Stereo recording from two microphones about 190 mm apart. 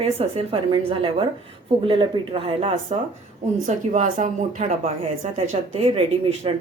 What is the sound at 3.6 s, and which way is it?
Speech, 40° right (ahead or behind).